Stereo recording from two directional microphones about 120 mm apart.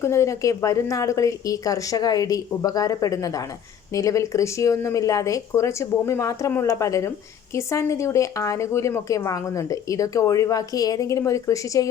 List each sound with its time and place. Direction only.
0.0 s speech: 25° left (ahead or behind)